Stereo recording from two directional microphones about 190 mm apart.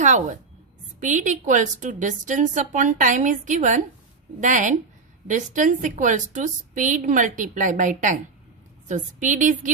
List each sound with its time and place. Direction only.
0.0 s a woman's voice: 40° right (ahead or behind)